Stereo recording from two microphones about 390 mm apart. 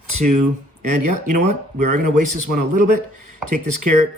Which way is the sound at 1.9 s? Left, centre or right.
Right.